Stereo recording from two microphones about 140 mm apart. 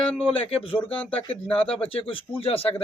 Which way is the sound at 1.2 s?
40° left (ahead or behind).